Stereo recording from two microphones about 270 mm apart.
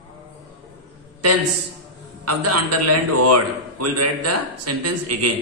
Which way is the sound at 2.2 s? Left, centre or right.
Right.